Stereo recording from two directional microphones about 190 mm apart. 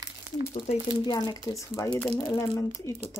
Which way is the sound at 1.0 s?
20° left (ahead or behind).